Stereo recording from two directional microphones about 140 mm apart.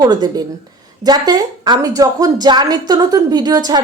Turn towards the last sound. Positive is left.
turn(degrees=-30)  # may be behind; listen again after turning